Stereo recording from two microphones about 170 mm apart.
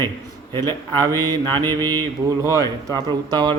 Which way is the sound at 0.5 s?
25° right (ahead or behind).